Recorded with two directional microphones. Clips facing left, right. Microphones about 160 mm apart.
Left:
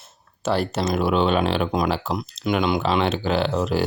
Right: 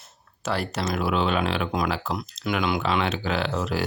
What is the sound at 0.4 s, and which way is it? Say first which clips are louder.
Speech: left 5 dB; 25° left (ahead or behind).